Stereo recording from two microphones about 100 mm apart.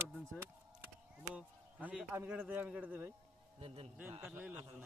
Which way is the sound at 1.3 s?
10° right (ahead or behind).